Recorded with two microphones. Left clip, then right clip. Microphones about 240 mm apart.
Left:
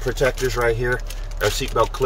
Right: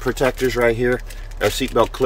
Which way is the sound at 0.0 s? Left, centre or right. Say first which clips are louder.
Right 2 dB; centre.